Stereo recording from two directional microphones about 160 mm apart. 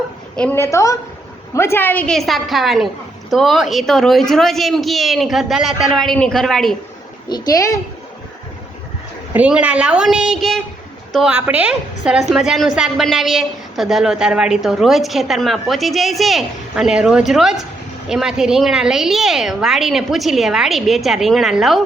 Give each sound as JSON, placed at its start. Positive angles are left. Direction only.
{"t": 0.3, "sound": "a woman's voice", "side_deg": 10}
{"t": 7.3, "sound": "speech", "side_deg": 25}
{"t": 9.3, "sound": "a woman's voice", "side_deg": -10}